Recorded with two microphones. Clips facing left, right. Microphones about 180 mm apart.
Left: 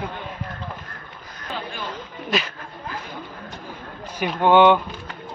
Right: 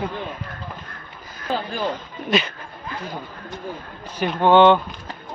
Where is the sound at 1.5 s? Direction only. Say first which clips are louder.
Right 7 dB; 35° right (ahead or behind).